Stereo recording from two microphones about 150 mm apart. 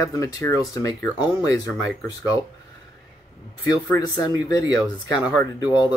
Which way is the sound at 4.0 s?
25° left (ahead or behind).